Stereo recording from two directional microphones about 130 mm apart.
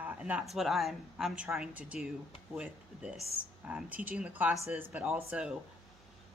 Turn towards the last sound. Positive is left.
turn(degrees=-15)  # may be behind; listen again after turning